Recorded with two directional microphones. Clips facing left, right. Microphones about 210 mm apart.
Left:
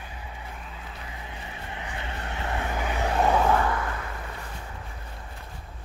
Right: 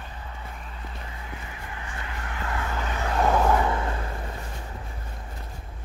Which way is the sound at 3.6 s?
25° right (ahead or behind).